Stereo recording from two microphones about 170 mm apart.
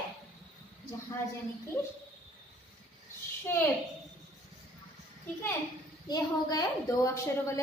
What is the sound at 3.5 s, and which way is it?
Speech, 15° left (ahead or behind).